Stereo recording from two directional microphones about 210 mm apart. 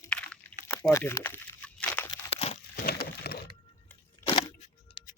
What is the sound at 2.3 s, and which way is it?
Crumpling, 30° left (ahead or behind).